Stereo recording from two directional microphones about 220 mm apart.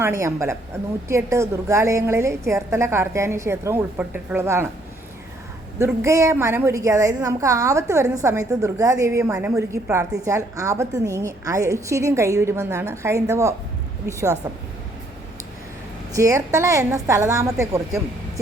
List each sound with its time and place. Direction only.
0.0 s a woman's voice: 10° right (ahead or behind)
5.8 s a woman's voice: 15° right (ahead or behind)
16.1 s a woman's voice: 15° right (ahead or behind)